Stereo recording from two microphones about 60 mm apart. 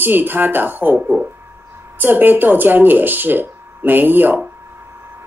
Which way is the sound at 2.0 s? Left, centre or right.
Right.